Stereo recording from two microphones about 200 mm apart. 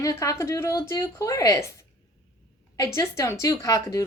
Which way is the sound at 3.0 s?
15° left (ahead or behind).